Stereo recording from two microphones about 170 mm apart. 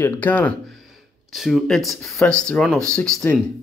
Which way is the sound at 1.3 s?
Centre (ahead or behind).